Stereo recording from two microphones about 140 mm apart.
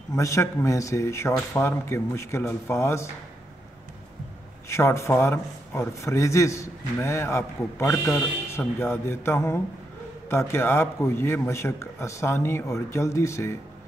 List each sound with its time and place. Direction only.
0.1 s speech: 20° left (ahead or behind)
4.6 s speech: 20° left (ahead or behind)